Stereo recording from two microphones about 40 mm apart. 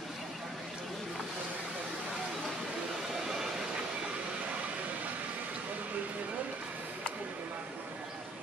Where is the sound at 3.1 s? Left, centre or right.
Centre.